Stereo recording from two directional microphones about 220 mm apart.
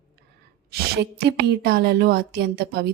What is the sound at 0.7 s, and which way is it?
Speech, 45° right (ahead or behind).